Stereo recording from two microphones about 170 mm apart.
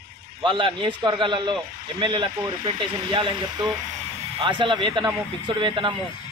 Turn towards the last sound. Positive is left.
turn(degrees=-30)  # may be behind; listen again after turning